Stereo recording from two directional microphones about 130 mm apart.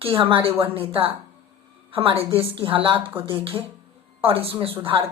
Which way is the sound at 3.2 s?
40° right (ahead or behind).